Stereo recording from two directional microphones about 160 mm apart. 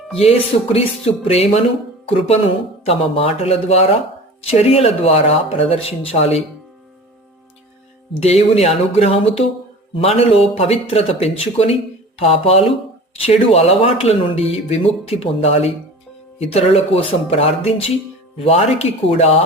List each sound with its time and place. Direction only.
0.1 s speech: 40° left (ahead or behind)
8.2 s speech: 40° left (ahead or behind)